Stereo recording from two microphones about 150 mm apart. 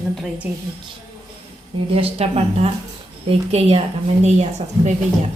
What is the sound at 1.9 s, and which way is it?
A woman's voice, 40° right (ahead or behind).